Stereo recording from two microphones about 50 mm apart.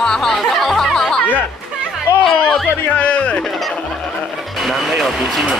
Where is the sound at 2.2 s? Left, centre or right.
Centre.